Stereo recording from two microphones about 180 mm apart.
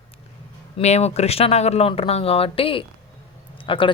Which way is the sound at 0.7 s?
35° left (ahead or behind).